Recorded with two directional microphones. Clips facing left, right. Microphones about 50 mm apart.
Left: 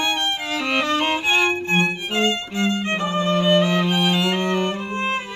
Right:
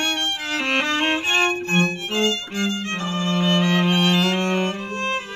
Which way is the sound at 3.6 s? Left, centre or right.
Right.